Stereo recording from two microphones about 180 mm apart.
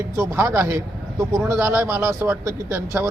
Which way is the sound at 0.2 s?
15° right (ahead or behind).